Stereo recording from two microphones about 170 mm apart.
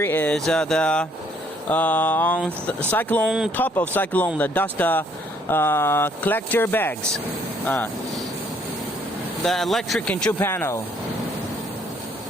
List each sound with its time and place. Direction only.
0.0 s speech: 10° left (ahead or behind)
3.2 s speech: 5° right (ahead or behind)
3.5 s speech: 10° left (ahead or behind)
9.4 s speech: centre (ahead or behind)